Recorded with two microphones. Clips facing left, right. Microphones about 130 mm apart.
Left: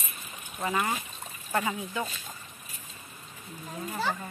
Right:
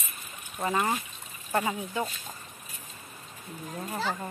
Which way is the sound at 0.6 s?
30° right (ahead or behind).